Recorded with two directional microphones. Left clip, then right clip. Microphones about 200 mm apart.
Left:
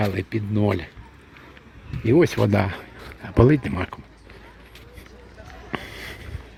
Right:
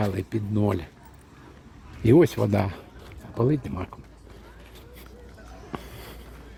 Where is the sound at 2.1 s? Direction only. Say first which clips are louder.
Left 2 dB; centre (ahead or behind).